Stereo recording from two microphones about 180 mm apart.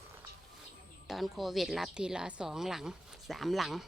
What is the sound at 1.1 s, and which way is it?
A woman's voice, centre (ahead or behind).